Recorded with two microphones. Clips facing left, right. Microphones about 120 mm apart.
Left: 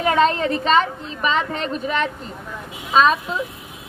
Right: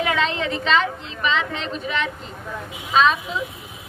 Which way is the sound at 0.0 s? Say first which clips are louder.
Left 5 dB; 40° left (ahead or behind).